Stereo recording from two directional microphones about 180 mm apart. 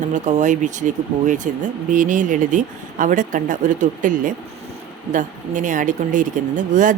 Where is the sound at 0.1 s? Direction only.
40° right (ahead or behind).